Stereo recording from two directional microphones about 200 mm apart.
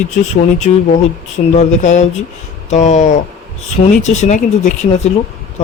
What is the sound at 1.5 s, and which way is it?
Speech, 35° left (ahead or behind).